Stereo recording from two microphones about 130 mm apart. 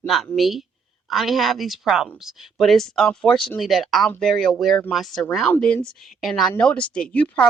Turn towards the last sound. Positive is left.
turn(degrees=10)  # may be behind; listen again after turning